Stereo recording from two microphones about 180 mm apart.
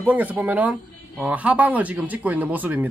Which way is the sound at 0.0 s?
10° right (ahead or behind).